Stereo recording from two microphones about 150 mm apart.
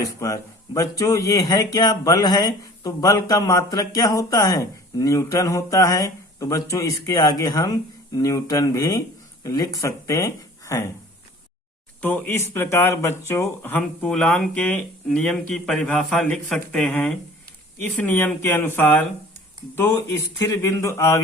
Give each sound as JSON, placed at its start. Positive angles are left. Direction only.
{"t": 0.2, "sound": "speech", "side_deg": 20}
{"t": 11.9, "sound": "speech", "side_deg": 10}